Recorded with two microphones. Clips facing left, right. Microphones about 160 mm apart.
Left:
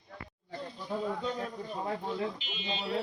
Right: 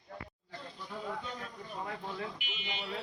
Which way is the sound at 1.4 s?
35° left (ahead or behind).